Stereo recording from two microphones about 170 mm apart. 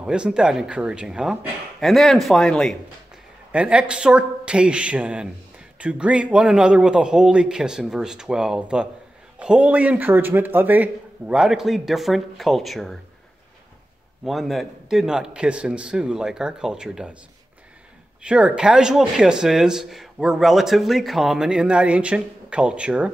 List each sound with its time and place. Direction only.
0.0 s speech: 5° right (ahead or behind)
3.5 s speech: 5° right (ahead or behind)
14.2 s speech: centre (ahead or behind)
18.2 s speech: 5° right (ahead or behind)